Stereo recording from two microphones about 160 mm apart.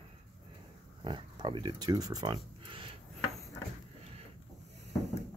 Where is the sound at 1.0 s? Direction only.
30° right (ahead or behind).